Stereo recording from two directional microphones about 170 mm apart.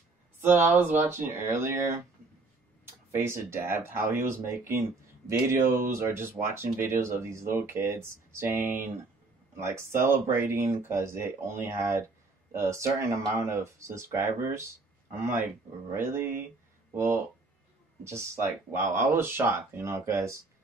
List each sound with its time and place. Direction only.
0.4 s speech: 15° right (ahead or behind)